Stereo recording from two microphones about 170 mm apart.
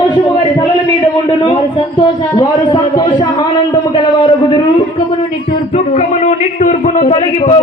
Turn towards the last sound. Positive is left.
turn(degrees=40)  # may be behind; listen again after turning